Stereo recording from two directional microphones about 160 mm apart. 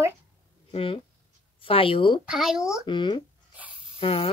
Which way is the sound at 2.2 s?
5° right (ahead or behind).